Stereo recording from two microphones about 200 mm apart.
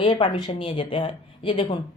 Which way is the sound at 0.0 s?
25° left (ahead or behind).